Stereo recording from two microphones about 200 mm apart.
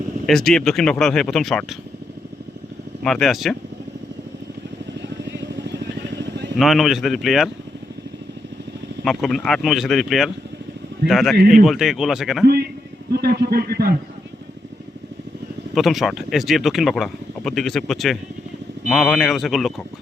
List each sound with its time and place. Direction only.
0.3 s speech: centre (ahead or behind)
3.0 s speech: centre (ahead or behind)
5.0 s vehicle: 60° right (ahead or behind)
6.6 s speech: centre (ahead or behind)
9.0 s speech: centre (ahead or behind)
13.1 s a man's voice: 50° right (ahead or behind)
15.7 s speech: centre (ahead or behind)